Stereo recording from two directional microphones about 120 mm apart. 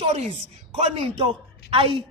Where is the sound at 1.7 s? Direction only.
45° right (ahead or behind).